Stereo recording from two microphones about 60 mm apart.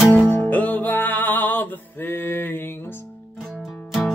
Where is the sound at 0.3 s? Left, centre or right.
Left.